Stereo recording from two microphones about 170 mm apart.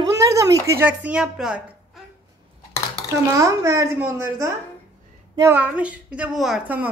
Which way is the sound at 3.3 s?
20° right (ahead or behind).